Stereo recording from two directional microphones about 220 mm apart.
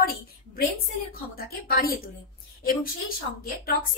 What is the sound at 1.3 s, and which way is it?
Speech, 40° left (ahead or behind).